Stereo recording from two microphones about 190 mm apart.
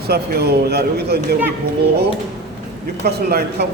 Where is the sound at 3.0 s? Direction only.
55° right (ahead or behind).